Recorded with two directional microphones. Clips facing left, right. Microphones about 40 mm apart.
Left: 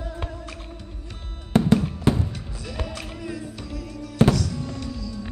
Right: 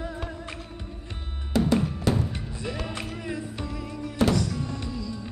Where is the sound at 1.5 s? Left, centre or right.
Left.